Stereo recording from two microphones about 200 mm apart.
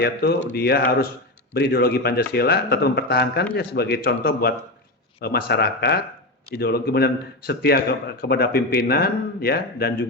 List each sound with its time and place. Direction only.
0.0 s speech: 55° left (ahead or behind)